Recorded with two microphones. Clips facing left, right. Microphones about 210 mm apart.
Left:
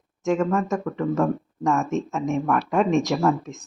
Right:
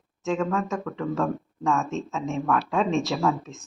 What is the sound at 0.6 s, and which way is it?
Speech, 20° left (ahead or behind).